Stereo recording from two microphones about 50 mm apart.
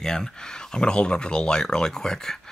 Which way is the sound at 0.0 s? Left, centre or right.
Centre.